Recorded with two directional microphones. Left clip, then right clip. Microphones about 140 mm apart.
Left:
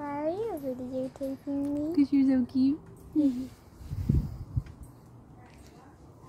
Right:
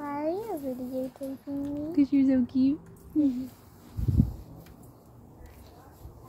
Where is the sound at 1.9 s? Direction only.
20° left (ahead or behind).